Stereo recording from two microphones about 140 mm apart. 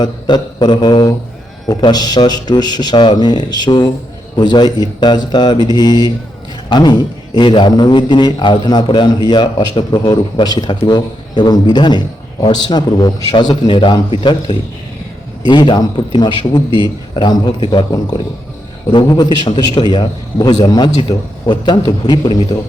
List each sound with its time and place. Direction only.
0.0 s a man's voice: 30° left (ahead or behind)